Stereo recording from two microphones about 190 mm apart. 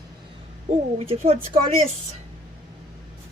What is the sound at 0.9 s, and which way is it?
Speech, 30° right (ahead or behind).